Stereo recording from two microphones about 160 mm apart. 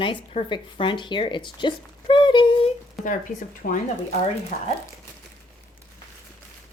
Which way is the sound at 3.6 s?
60° left (ahead or behind).